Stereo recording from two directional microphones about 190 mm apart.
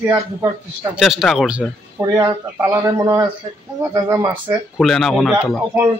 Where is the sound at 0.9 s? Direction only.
Centre (ahead or behind).